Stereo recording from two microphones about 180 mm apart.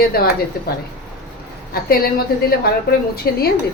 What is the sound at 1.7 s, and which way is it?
A woman's voice, 55° left (ahead or behind).